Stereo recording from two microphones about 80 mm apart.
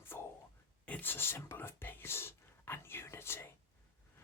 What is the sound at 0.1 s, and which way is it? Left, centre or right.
Whispering, left.